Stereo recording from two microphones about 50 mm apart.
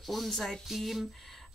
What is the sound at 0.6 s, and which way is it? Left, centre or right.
Speech, centre.